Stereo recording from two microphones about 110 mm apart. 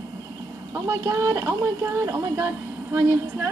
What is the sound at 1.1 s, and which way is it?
A woman's voice, 35° right (ahead or behind).